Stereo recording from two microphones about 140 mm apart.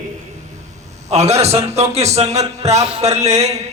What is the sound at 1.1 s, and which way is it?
A man's voice, 50° right (ahead or behind).